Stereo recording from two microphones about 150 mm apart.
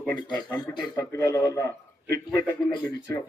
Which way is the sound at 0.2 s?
30° left (ahead or behind).